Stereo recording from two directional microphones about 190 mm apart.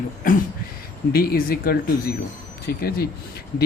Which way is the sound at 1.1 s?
55° left (ahead or behind).